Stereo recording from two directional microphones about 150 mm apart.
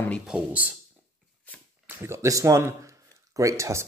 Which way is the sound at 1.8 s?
15° right (ahead or behind).